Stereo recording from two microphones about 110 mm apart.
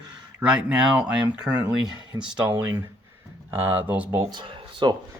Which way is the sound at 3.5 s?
20° right (ahead or behind).